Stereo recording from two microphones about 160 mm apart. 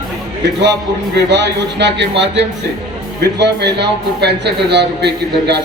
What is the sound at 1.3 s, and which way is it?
A man's voice, 90° right.